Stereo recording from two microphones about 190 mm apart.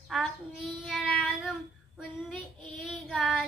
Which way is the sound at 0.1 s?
Centre (ahead or behind).